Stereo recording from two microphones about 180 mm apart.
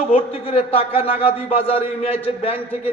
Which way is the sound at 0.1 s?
30° left (ahead or behind).